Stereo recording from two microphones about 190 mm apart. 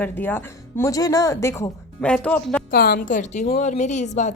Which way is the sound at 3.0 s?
40° left (ahead or behind).